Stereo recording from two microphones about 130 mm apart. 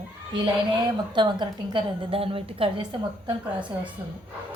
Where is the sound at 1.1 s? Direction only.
35° right (ahead or behind).